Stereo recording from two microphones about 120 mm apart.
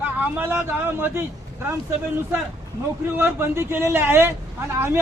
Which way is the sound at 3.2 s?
20° right (ahead or behind).